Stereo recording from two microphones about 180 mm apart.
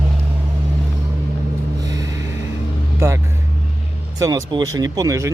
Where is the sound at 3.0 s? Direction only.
15° right (ahead or behind).